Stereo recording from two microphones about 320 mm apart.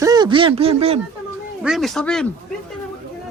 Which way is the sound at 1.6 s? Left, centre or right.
Centre.